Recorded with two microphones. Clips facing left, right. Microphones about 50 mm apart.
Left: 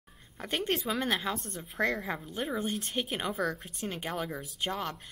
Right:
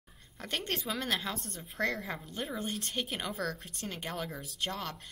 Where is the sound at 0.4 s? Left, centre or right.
Centre.